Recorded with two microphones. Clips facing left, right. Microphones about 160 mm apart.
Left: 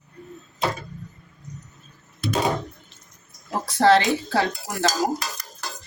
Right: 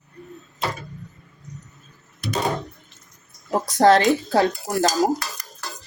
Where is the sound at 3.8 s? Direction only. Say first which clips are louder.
Right 2 dB; 45° right (ahead or behind).